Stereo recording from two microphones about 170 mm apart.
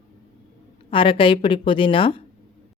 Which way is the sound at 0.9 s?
30° left (ahead or behind).